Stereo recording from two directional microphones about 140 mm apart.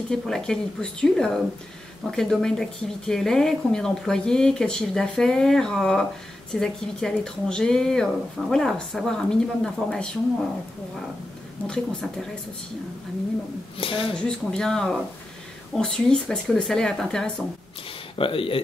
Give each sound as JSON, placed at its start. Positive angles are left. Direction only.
{"t": 0.1, "sound": "speech", "side_deg": 5}
{"t": 11.6, "sound": "speech", "side_deg": 5}
{"t": 13.7, "sound": "speech", "side_deg": 40}
{"t": 14.2, "sound": "speech", "side_deg": 5}
{"t": 18.1, "sound": "speech", "side_deg": 40}